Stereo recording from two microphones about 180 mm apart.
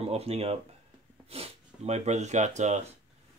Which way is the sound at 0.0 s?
35° right (ahead or behind).